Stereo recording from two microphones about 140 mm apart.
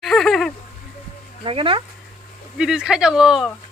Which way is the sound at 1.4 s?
40° right (ahead or behind).